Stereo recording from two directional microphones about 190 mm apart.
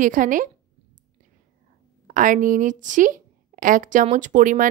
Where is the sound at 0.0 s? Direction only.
45° right (ahead or behind).